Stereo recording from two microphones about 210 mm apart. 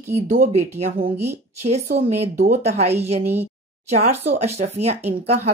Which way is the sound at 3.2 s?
10° right (ahead or behind).